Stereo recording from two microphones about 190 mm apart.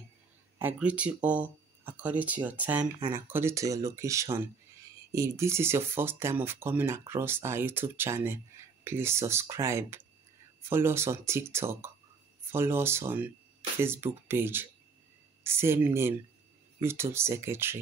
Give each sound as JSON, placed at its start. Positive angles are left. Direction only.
{"t": 0.6, "sound": "speech", "side_deg": -10}